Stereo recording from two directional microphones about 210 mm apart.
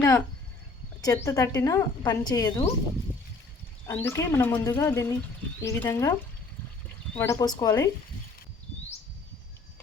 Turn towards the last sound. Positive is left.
turn(degrees=15)  # may be behind; listen again after turning